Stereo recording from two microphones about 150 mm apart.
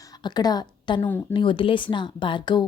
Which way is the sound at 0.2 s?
30° left (ahead or behind).